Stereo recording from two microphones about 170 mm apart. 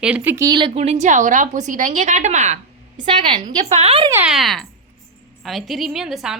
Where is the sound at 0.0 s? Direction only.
10° right (ahead or behind); by 2.6 s 45° right (ahead or behind).